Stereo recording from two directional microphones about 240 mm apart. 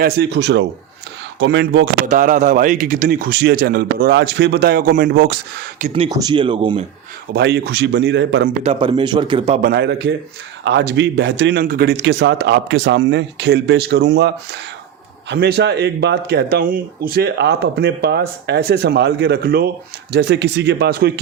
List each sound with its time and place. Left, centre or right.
0.0 s speech: right
2.0 s a man's voice: right
5.9 s speech: centre
7.3 s speech: right
8.6 s speech: right
9.6 s speech: right